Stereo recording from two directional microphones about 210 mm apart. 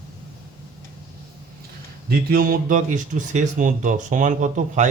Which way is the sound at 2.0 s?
45° right (ahead or behind).